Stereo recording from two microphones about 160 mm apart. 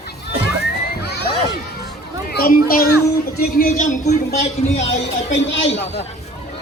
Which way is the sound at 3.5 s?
55° left (ahead or behind).